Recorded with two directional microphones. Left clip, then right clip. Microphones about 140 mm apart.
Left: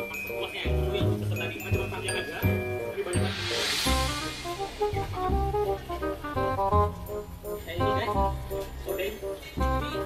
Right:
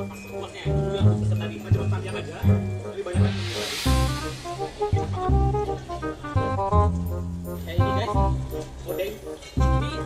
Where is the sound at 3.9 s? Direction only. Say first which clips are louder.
Right 1 dB; centre (ahead or behind).